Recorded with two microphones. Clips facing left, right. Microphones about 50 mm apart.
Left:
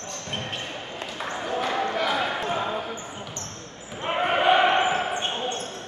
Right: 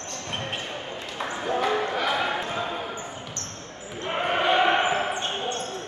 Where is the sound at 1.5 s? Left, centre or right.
Centre.